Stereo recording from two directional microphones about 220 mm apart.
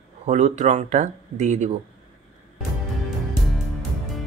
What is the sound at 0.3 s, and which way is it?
Speech, 30° right (ahead or behind).